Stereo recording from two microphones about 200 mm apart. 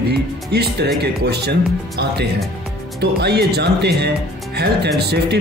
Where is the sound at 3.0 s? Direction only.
55° right (ahead or behind).